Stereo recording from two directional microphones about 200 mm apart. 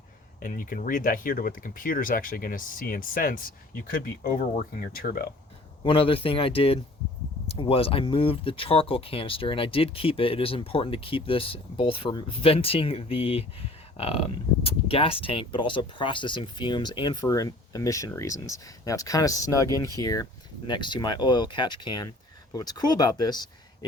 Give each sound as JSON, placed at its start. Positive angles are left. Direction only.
{"t": 0.3, "sound": "speech", "side_deg": 45}
{"t": 5.8, "sound": "speech", "side_deg": 25}